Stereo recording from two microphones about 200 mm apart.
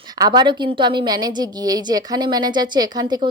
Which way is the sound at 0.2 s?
20° right (ahead or behind).